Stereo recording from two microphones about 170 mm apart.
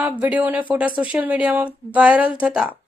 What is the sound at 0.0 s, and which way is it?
Speech, 10° right (ahead or behind).